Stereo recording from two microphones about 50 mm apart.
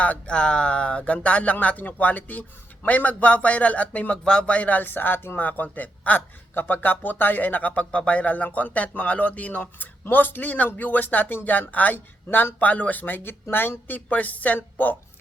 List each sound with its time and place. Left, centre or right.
0.0 s speech: left
4.2 s speech: centre